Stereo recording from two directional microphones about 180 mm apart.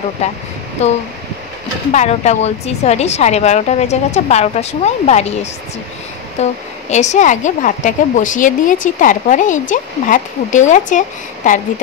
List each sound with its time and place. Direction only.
0.2 s a woman's voice: 40° left (ahead or behind)